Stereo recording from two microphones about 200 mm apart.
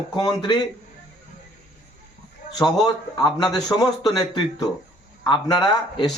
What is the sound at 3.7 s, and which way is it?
A man's voice, 20° left (ahead or behind).